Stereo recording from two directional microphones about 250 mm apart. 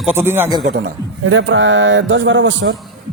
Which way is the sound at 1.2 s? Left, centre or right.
Right.